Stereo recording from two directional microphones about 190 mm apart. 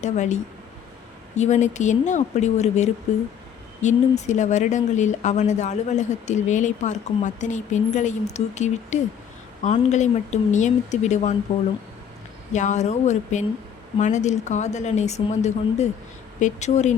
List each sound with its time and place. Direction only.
0.0 s speech: 40° left (ahead or behind)
1.4 s speech: 40° left (ahead or behind)
12.5 s speech: 40° left (ahead or behind)